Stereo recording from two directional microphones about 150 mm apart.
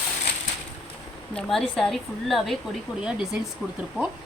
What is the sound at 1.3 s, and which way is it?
A woman's voice, 5° left (ahead or behind).